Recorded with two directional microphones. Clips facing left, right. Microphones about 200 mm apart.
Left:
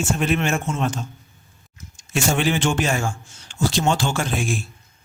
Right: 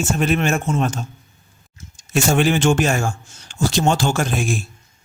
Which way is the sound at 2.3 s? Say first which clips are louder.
Right 5 dB; 45° right (ahead or behind).